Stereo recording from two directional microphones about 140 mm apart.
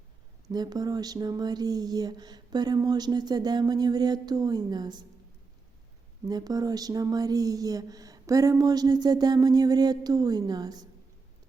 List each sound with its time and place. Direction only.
0.4 s speech: 30° right (ahead or behind)
6.2 s speech: 30° right (ahead or behind)